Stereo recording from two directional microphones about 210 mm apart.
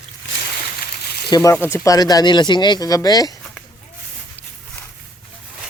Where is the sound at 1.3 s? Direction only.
15° left (ahead or behind).